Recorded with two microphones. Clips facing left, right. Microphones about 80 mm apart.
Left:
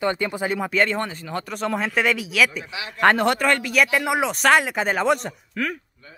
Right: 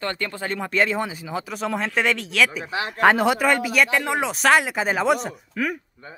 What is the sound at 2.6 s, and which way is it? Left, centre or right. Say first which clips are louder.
Speech: right 6 dB; right.